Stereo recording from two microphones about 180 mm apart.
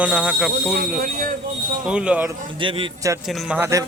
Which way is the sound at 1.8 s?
5° right (ahead or behind).